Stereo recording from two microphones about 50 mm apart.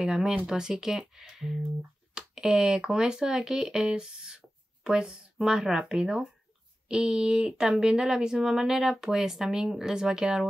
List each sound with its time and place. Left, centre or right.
0.0 s speech: centre